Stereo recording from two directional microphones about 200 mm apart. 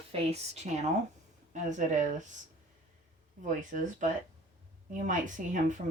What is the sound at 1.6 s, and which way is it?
Speech, 35° right (ahead or behind).